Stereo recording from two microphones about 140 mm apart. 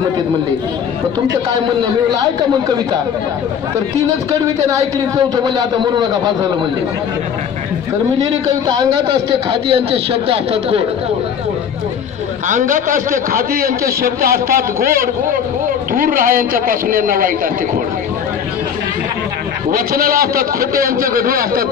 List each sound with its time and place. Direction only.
4.6 s speech: 25° right (ahead or behind)
9.5 s speech: 40° right (ahead or behind)
12.4 s a man's voice: 70° right (ahead or behind); by 17.3 s 85° right
19.7 s a man's voice: 90° right